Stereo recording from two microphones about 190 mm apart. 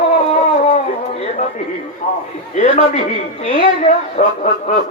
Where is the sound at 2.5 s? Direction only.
40° left (ahead or behind).